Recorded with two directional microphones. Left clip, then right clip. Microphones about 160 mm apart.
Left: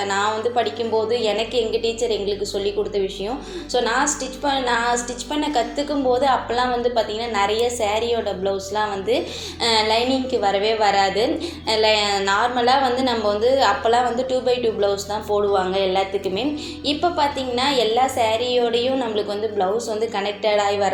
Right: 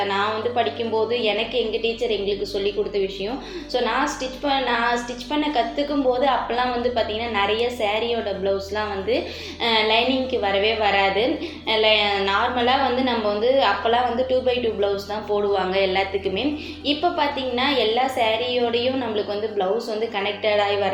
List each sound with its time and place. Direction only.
0.0 s a woman's voice: 40° left (ahead or behind)
3.7 s a woman's voice: 35° left (ahead or behind)